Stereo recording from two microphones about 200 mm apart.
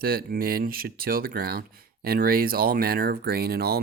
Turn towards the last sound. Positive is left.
turn(degrees=-50)  # may be behind; listen again after turning